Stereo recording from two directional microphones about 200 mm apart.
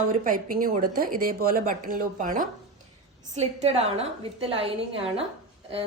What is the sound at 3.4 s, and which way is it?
A woman's voice, 30° right (ahead or behind).